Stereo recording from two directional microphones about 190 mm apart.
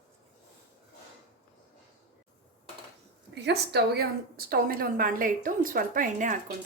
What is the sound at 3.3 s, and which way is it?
A woman's voice, 60° right (ahead or behind).